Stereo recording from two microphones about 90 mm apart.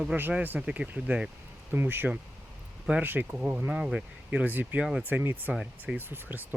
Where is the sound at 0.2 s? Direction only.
20° right (ahead or behind).